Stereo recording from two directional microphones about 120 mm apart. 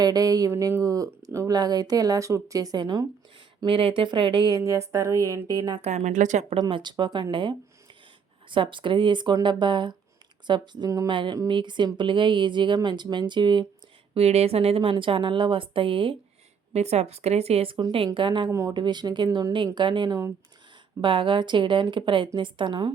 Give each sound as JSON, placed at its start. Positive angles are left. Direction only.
{"t": 0.0, "sound": "speech", "side_deg": -30}
{"t": 3.7, "sound": "speech", "side_deg": -45}
{"t": 5.8, "sound": "speech", "side_deg": -70}
{"t": 6.6, "sound": "a woman's voice", "side_deg": -40}
{"t": 14.1, "sound": "a woman's voice", "side_deg": -60}
{"t": 16.7, "sound": "a woman's voice", "side_deg": -65}
{"t": 21.0, "sound": "a woman's voice", "side_deg": -45}